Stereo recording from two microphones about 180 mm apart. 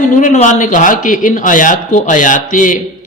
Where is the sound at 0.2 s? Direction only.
45° left (ahead or behind).